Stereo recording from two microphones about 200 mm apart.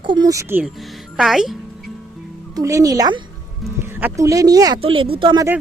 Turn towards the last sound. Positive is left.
turn(degrees=-25)  # may be behind; listen again after turning